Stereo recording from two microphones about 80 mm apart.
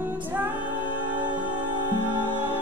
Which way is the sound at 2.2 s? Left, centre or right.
Left.